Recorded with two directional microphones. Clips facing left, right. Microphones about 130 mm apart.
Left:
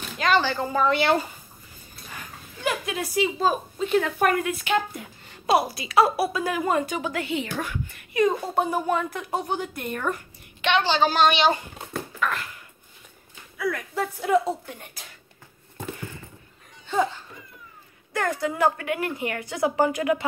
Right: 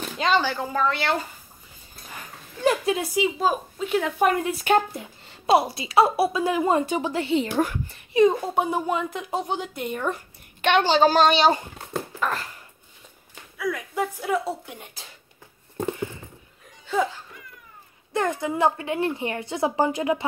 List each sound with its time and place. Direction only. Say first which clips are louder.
0.4 s a woman's voice: left 1 dB; 10° right (ahead or behind)
0.7 s speech: left 3 dB; 15° left (ahead or behind)
2.6 s a woman's voice: right 6 dB; 30° right (ahead or behind)
3.2 s a woman's voice: left 4 dB; 10° right (ahead or behind)
4.3 s a woman's voice: right 3 dB; 30° right (ahead or behind)
4.9 s a woman's voice: right 2 dB; 25° right (ahead or behind)
8.3 s a woman's voice: right 1 dB; 10° right (ahead or behind)
10.6 s a woman's voice: right 3 dB; 45° right (ahead or behind)
13.6 s a woman's voice: even; 10° right (ahead or behind)
18.1 s a woman's voice: right 1 dB; 20° right (ahead or behind)